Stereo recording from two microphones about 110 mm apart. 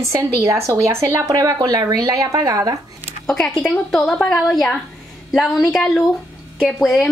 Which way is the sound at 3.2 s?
5° left (ahead or behind).